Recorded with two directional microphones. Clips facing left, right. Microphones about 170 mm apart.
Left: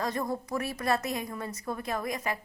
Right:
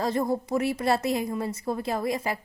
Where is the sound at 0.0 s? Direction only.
30° right (ahead or behind).